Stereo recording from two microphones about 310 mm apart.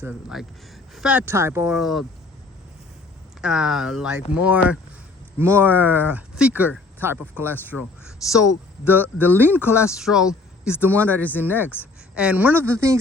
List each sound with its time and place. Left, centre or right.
0.0 s speech: centre
3.4 s speech: centre